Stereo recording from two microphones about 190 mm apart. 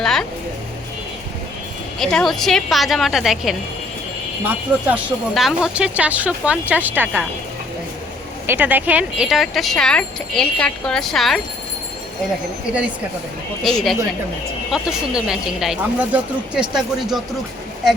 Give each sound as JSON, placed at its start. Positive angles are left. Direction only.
{"t": 0.0, "sound": "a sound", "side_deg": 5}
{"t": 2.0, "sound": "speech", "side_deg": 0}
{"t": 8.4, "sound": "speech", "side_deg": -10}
{"t": 13.6, "sound": "speech", "side_deg": 0}